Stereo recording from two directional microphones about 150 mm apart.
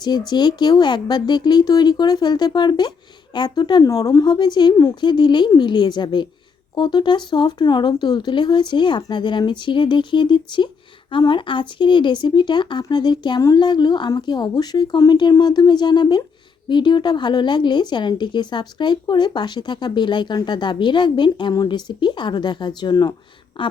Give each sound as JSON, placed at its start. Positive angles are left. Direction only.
{"t": 0.0, "sound": "a woman's voice", "side_deg": 30}